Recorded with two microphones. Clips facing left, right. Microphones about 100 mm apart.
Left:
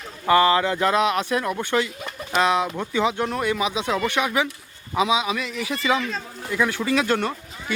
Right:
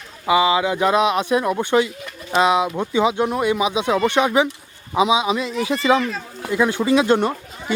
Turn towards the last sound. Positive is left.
turn(degrees=-20)  # may be behind; listen again after turning